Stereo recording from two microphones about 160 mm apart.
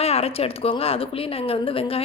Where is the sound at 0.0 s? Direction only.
40° left (ahead or behind).